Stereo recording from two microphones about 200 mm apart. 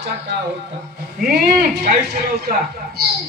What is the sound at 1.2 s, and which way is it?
Speech, 45° right (ahead or behind).